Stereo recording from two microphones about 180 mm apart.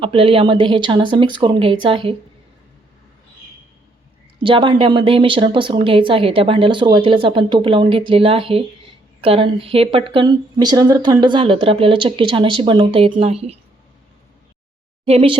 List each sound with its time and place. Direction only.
0.0 s a woman's voice: 30° right (ahead or behind)
4.4 s a woman's voice: 30° right (ahead or behind)
15.0 s speech: 30° right (ahead or behind)